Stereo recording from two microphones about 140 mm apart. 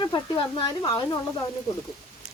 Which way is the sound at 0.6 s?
25° left (ahead or behind).